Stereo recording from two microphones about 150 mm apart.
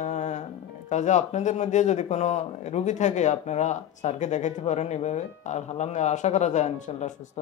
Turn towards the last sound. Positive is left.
turn(degrees=50)  # may be behind; listen again after turning